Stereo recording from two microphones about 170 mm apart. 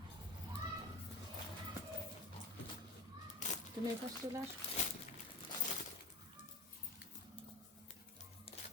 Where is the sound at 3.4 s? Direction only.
45° left (ahead or behind).